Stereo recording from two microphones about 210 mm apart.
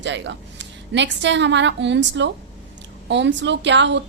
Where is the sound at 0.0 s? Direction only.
60° right (ahead or behind).